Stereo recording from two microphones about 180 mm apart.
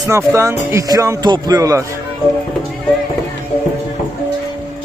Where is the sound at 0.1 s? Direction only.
15° right (ahead or behind).